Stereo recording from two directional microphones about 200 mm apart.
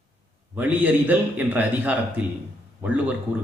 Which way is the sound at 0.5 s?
10° right (ahead or behind).